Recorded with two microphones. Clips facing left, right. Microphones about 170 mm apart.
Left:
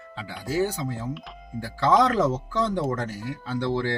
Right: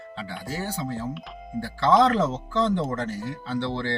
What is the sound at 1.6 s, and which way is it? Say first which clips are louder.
Speech: right 1 dB; 10° left (ahead or behind).